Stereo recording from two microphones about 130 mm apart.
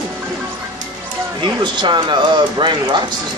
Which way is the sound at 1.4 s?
35° right (ahead or behind).